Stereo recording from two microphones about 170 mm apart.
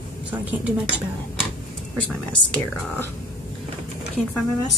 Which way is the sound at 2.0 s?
10° left (ahead or behind).